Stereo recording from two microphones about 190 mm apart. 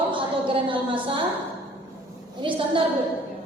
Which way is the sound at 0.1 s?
25° right (ahead or behind).